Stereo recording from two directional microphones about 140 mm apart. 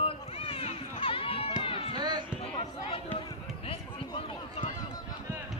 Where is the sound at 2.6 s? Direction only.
40° left (ahead or behind).